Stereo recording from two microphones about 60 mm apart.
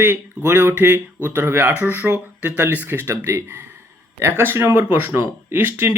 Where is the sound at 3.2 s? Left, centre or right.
Right.